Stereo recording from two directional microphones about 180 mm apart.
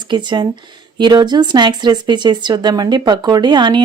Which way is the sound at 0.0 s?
25° right (ahead or behind).